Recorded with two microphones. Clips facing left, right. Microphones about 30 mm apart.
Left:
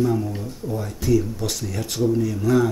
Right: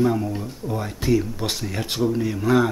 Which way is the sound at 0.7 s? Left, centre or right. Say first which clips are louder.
Even; right.